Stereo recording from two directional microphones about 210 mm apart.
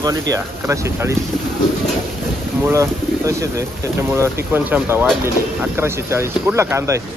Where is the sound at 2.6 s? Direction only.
15° right (ahead or behind).